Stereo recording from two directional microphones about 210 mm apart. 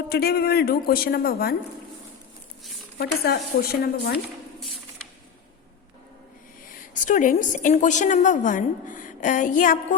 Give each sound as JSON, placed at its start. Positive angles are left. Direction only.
{"t": 0.1, "sound": "a woman's voice", "side_deg": 50}
{"t": 3.0, "sound": "a woman's voice", "side_deg": 50}
{"t": 6.7, "sound": "a woman's voice", "side_deg": 40}